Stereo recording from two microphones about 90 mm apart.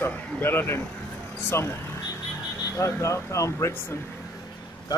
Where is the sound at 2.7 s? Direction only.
35° left (ahead or behind).